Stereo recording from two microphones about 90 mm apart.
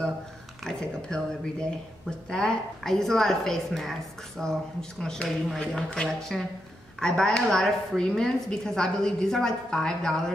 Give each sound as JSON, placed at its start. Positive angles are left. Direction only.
{"t": 0.7, "sound": "a woman's voice", "side_deg": 10}